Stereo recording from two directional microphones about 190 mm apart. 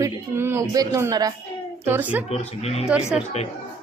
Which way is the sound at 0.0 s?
15° right (ahead or behind).